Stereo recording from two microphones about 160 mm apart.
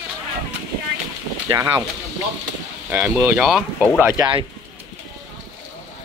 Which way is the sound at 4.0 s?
15° right (ahead or behind).